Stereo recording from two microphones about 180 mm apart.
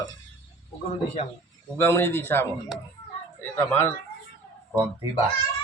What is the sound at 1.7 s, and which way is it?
Speech, 15° left (ahead or behind).